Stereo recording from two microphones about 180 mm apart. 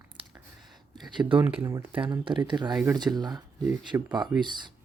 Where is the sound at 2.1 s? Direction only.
25° right (ahead or behind).